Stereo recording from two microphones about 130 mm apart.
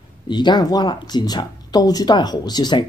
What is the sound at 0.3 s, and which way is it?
Speech, 35° left (ahead or behind).